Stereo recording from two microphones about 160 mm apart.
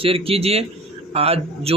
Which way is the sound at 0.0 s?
35° right (ahead or behind).